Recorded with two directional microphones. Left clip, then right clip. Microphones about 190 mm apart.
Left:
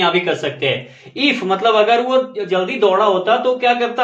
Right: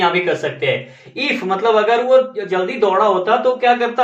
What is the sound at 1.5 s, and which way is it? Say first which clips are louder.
Speech: even; 45° left (ahead or behind).